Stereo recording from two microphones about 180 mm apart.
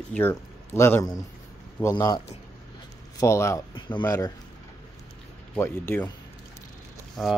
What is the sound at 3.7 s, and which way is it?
Speech, 25° left (ahead or behind).